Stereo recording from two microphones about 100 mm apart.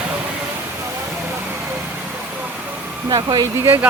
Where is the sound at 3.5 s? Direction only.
25° right (ahead or behind).